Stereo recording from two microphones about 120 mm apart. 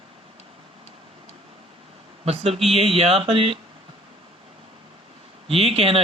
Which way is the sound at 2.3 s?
60° right (ahead or behind).